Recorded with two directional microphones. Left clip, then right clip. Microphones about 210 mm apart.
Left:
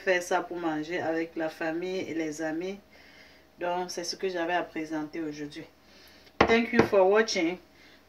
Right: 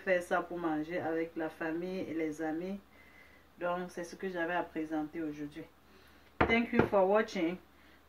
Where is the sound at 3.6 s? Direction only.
15° right (ahead or behind).